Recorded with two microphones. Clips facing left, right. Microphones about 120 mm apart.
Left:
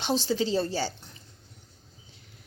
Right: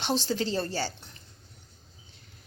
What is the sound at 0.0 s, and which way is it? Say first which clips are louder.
Speech: left 2 dB; 10° left (ahead or behind).